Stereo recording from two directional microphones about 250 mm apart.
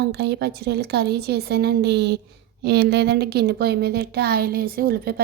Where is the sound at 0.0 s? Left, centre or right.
Right.